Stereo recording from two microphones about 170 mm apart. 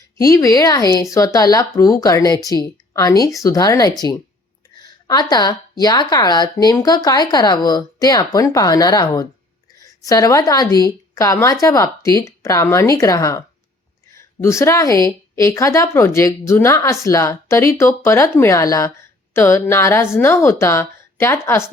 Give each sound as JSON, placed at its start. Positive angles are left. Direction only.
{"t": 0.2, "sound": "speech", "side_deg": 20}